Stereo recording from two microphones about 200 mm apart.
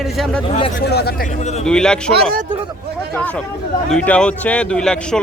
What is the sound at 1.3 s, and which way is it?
Speech, 35° left (ahead or behind).